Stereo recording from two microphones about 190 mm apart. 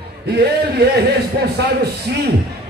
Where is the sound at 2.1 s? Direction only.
55° right (ahead or behind).